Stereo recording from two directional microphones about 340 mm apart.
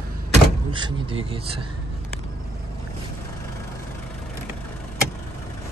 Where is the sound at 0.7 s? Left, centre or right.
Centre.